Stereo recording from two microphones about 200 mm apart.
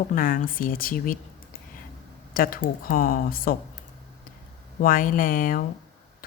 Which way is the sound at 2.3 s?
45° left (ahead or behind).